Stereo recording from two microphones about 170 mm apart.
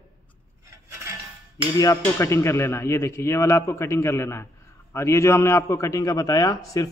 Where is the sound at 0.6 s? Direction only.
15° right (ahead or behind).